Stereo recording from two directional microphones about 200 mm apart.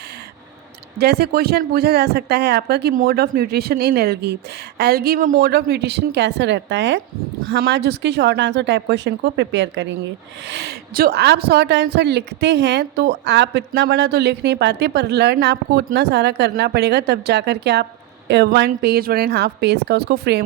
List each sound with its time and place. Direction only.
0.9 s speech: 55° right (ahead or behind)